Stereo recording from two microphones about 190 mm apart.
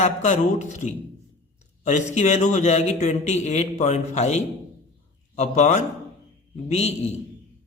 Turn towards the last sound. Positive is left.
turn(degrees=35)  # may be behind; listen again after turning